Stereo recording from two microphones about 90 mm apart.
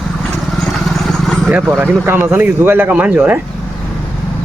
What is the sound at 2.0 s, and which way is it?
Speech, 20° right (ahead or behind).